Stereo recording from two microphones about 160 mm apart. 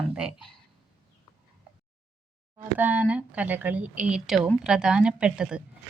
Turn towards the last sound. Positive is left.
turn(degrees=-5)  # may be behind; listen again after turning